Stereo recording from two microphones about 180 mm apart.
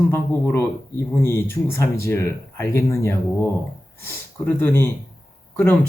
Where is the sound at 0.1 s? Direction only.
15° left (ahead or behind).